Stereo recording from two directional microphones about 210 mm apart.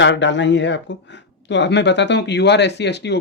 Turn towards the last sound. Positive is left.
turn(degrees=55)  # may be behind; listen again after turning